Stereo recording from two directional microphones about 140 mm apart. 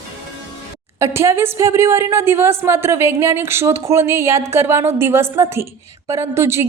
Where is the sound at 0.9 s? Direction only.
20° right (ahead or behind).